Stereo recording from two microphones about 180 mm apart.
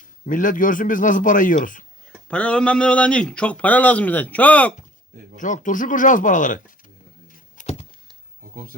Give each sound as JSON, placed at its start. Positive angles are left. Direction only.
{"t": 0.3, "sound": "a man's voice", "side_deg": 45}
{"t": 2.2, "sound": "speech", "side_deg": 5}
{"t": 5.4, "sound": "a man's voice", "side_deg": 45}
{"t": 7.6, "sound": "a sound", "side_deg": 40}